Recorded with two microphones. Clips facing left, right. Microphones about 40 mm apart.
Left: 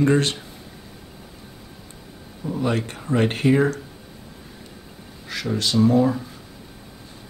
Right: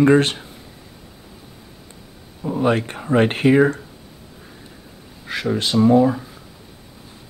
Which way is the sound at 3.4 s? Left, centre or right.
Centre.